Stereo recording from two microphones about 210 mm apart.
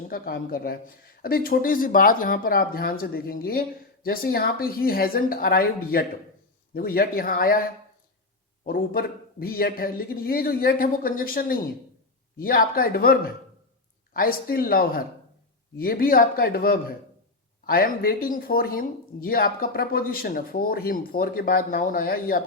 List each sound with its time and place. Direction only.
0.1 s speech: 45° left (ahead or behind)
8.6 s speech: 45° left (ahead or behind)